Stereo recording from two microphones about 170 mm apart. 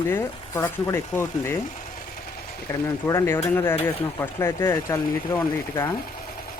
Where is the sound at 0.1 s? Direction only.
15° left (ahead or behind).